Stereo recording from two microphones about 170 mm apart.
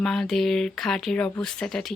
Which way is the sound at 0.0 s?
5° left (ahead or behind).